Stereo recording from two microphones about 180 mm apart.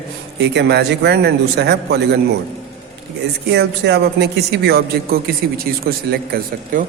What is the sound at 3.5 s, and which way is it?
Speech, 65° right (ahead or behind).